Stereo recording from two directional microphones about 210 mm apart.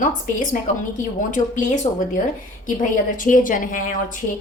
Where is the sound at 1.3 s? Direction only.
35° left (ahead or behind).